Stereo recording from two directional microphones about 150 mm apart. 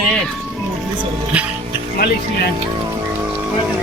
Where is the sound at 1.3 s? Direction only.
10° right (ahead or behind).